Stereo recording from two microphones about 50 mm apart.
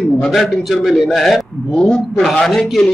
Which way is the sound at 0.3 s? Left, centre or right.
Centre.